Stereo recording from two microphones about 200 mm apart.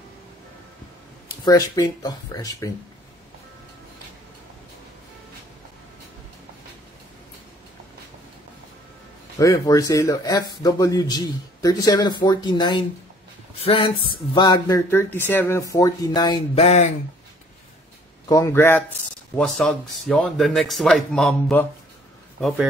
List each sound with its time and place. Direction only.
1.4 s a man's voice: 20° left (ahead or behind)
9.4 s a man's voice: 15° left (ahead or behind)
15.1 s a man's voice: 10° left (ahead or behind); by 16.8 s 30° left (ahead or behind)
18.3 s a man's voice: 15° left (ahead or behind)